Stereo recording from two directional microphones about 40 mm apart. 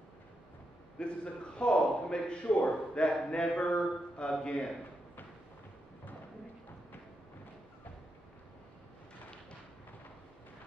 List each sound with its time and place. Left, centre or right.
0.9 s speech: left